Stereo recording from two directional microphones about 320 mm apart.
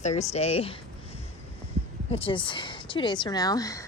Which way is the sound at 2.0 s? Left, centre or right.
Centre.